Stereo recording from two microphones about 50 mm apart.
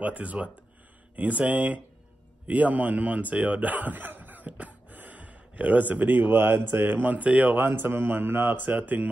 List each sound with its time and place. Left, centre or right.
0.0 s speech: right
4.5 s a sound: right
6.9 s speech: right
7.5 s speech: right